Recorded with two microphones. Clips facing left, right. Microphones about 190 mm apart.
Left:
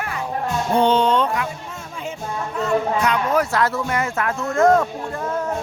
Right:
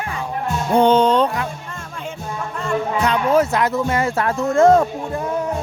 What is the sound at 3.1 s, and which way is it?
Speech, 25° right (ahead or behind).